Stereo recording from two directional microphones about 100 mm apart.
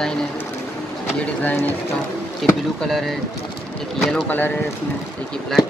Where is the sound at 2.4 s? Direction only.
Centre (ahead or behind).